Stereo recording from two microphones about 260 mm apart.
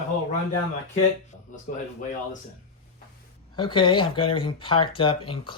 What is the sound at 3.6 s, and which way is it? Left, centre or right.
Speech, centre.